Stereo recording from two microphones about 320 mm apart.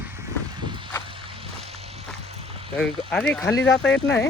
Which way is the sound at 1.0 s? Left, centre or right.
Centre.